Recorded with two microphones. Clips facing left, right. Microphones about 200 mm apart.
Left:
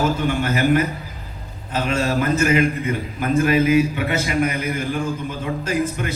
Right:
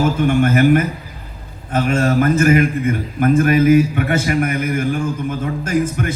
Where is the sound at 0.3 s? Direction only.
50° right (ahead or behind).